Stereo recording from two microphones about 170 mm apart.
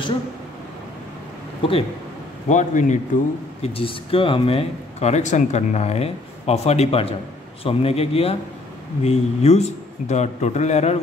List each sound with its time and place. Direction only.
1.6 s speech: 30° left (ahead or behind)
2.4 s a man's voice: 45° left (ahead or behind)
3.6 s speech: 35° left (ahead or behind)